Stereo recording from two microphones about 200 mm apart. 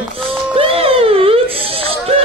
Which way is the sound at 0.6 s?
30° right (ahead or behind).